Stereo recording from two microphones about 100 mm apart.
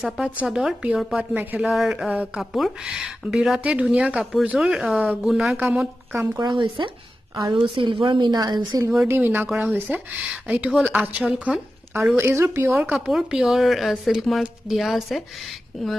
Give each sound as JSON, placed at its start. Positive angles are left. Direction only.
{"t": 0.4, "sound": "speech", "side_deg": -5}
{"t": 1.7, "sound": "speech", "side_deg": -5}
{"t": 6.8, "sound": "a woman's voice", "side_deg": -50}
{"t": 9.0, "sound": "speech", "side_deg": -20}
{"t": 12.9, "sound": "speech", "side_deg": -5}